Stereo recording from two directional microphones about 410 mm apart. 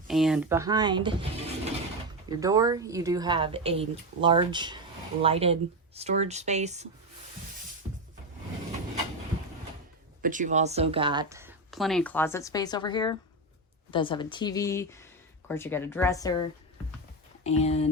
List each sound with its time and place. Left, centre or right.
0.1 s a woman's voice: centre
10.2 s speech: centre
17.4 s speech: centre